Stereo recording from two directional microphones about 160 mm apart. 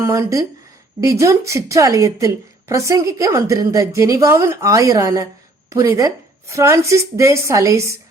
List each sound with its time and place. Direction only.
0.0 s a woman's voice: 20° right (ahead or behind)